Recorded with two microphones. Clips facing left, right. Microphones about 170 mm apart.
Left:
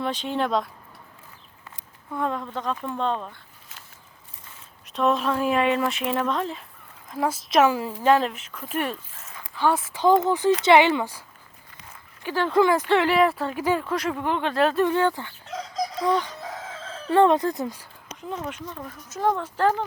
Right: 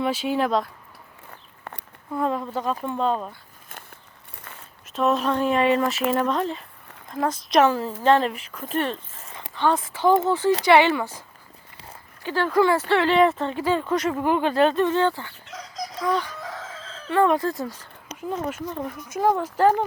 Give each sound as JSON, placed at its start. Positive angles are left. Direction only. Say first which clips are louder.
{"t": 0.0, "sound": "speech", "louder": "right 3 dB", "side_deg": -5}
{"t": 1.3, "sound": "a sound", "louder": "right 7 dB", "side_deg": -60}
{"t": 2.1, "sound": "speech", "louder": "right 3 dB", "side_deg": -5}
{"t": 4.5, "sound": "a sound", "louder": "right 6 dB", "side_deg": -65}
{"t": 4.9, "sound": "speech", "louder": "right 1 dB", "side_deg": 0}
{"t": 9.2, "sound": "a sound", "louder": "right 3 dB", "side_deg": -25}
{"t": 9.6, "sound": "speech", "louder": "right 1 dB", "side_deg": 10}
{"t": 12.2, "sound": "speech", "louder": "even", "side_deg": 15}
{"t": 13.1, "sound": "speech", "louder": "right 2 dB", "side_deg": 5}
{"t": 13.6, "sound": "speech", "louder": "even", "side_deg": 15}
{"t": 13.8, "sound": "speech", "louder": "right 3 dB", "side_deg": 0}
{"t": 14.8, "sound": "speech", "louder": "right 1 dB", "side_deg": 10}
{"t": 19.0, "sound": "speech", "louder": "right 2 dB", "side_deg": -10}